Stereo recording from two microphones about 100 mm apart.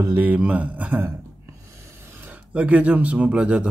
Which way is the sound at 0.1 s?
15° right (ahead or behind).